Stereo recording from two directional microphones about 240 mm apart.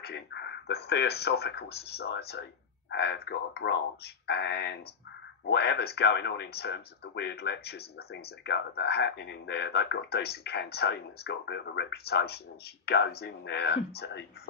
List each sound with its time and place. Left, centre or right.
0.0 s speech: left